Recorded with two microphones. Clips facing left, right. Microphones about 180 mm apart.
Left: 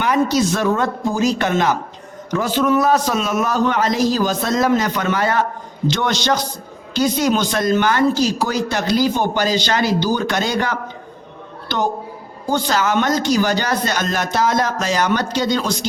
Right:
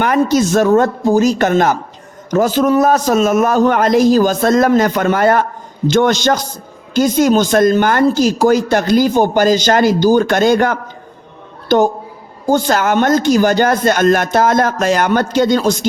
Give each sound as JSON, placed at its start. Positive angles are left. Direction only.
{"t": 0.0, "sound": "speech", "side_deg": -50}